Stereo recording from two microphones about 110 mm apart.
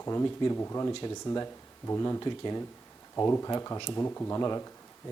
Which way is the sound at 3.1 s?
25° left (ahead or behind).